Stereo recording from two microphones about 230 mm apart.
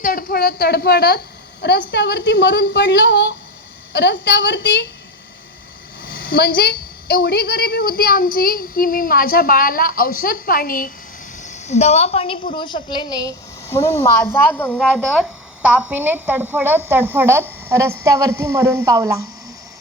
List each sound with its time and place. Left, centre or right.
0.0 s a woman's voice: left
6.2 s a woman's voice: left; by 19.1 s centre